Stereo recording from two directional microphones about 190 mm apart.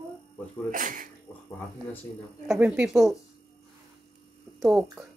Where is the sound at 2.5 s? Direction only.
10° right (ahead or behind).